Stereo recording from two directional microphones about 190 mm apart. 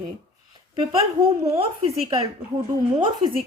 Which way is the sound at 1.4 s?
30° right (ahead or behind).